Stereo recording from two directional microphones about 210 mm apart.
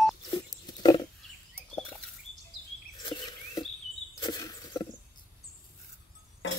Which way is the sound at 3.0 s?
20° left (ahead or behind).